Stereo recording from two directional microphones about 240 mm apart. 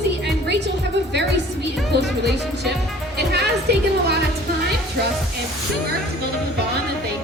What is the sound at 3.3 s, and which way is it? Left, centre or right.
Music, right.